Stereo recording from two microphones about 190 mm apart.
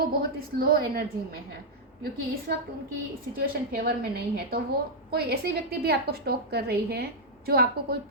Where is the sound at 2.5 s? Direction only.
55° right (ahead or behind).